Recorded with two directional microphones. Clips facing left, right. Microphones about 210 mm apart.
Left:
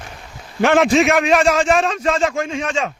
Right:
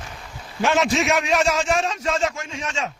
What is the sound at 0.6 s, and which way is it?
A man's voice, 55° left (ahead or behind).